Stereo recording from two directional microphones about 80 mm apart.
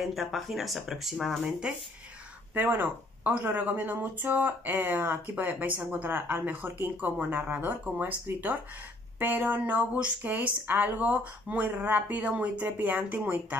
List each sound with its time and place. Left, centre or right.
0.0 s speech: centre
2.5 s speech: right